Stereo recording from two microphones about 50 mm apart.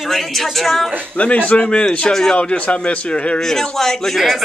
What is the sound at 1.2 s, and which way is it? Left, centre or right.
A man's voice, left.